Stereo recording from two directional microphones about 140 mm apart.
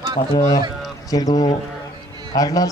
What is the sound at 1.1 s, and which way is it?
Speech, 30° left (ahead or behind).